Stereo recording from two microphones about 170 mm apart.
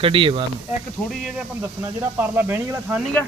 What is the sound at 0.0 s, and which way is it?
Speech, 30° right (ahead or behind).